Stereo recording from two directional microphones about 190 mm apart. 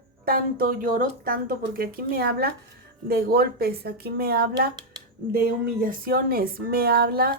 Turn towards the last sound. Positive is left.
turn(degrees=-55)  # may be behind; listen again after turning